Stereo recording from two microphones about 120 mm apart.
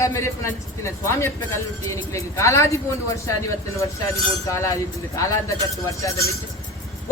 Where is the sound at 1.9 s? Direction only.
25° left (ahead or behind).